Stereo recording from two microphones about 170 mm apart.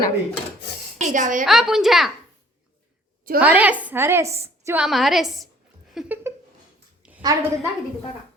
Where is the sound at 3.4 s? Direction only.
10° right (ahead or behind).